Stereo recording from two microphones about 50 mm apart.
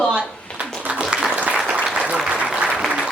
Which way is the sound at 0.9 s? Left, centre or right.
Centre.